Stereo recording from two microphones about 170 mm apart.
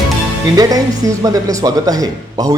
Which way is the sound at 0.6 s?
20° right (ahead or behind).